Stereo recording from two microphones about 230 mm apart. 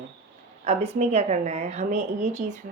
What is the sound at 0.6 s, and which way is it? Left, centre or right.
A woman's voice, right.